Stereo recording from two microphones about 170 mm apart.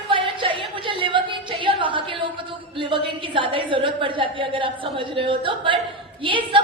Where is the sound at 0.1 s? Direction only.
30° right (ahead or behind).